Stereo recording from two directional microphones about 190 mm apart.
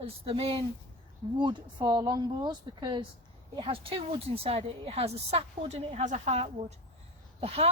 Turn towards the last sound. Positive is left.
turn(degrees=-30)  # may be behind; listen again after turning